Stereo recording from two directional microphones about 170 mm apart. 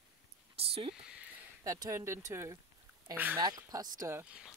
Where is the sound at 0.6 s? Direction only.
35° right (ahead or behind).